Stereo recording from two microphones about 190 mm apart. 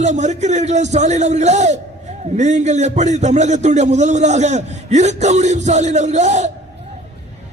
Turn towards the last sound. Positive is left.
turn(degrees=-35)  # may be behind; listen again after turning